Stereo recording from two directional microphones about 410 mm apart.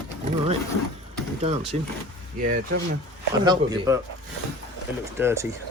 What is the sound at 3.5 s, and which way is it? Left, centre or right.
Speech, centre.